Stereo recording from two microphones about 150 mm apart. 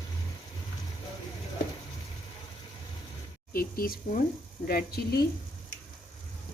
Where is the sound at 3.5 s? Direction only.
80° left.